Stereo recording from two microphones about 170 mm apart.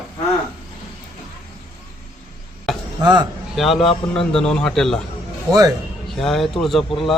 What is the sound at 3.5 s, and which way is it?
Speech, centre (ahead or behind).